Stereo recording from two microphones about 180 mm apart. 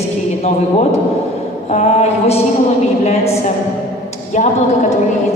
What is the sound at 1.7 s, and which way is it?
Speech, 35° left (ahead or behind).